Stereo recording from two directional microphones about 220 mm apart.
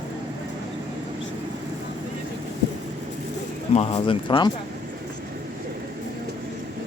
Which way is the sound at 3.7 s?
30° left (ahead or behind).